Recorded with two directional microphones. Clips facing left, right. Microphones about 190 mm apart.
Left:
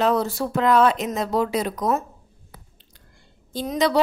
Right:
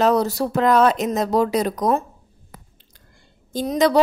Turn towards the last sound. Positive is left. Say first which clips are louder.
# right 4 dB
turn(degrees=-45)  # may be behind; listen again after turning